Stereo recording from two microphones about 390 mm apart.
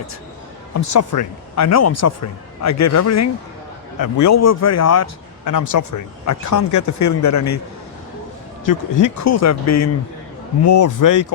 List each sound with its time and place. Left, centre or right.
0.7 s speech: left
8.6 s speech: left